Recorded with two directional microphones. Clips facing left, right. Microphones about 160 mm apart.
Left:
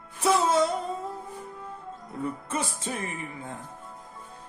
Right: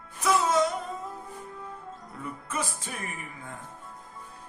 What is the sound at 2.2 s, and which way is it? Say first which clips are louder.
Music: left 4 dB; 30° left (ahead or behind).